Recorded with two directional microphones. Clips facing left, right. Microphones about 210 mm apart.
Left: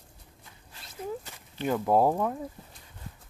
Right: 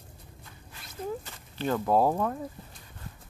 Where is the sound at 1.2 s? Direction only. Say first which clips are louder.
Even; 15° left (ahead or behind).